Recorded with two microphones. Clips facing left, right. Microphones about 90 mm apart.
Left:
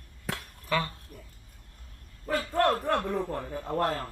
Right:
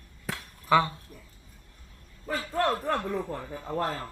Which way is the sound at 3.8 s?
50° left (ahead or behind).